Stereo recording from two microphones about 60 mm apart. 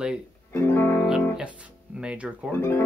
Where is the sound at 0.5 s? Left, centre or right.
Left.